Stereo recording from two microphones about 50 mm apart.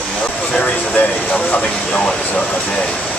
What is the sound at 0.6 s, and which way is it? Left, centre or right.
Speech, left.